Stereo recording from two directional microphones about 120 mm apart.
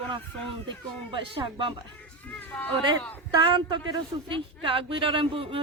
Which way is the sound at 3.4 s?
40° right (ahead or behind).